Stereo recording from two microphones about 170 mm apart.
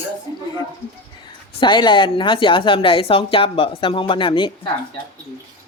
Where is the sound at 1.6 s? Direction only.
30° left (ahead or behind).